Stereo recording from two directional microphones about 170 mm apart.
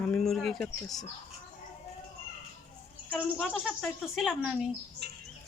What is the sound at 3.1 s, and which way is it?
A woman's voice, 5° left (ahead or behind).